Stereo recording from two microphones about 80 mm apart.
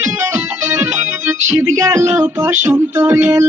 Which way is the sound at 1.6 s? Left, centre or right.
Right.